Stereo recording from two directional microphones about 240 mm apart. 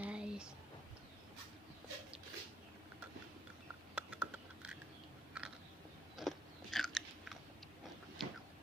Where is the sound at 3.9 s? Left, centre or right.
Centre.